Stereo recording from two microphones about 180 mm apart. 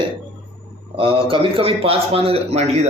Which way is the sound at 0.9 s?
30° right (ahead or behind).